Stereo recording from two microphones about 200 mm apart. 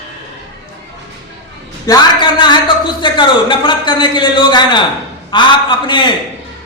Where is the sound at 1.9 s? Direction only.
20° left (ahead or behind).